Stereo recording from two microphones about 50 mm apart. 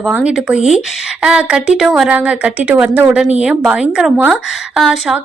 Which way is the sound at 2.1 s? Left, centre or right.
Right.